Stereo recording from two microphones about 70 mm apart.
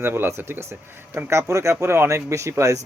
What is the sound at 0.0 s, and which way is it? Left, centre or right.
Speech, right.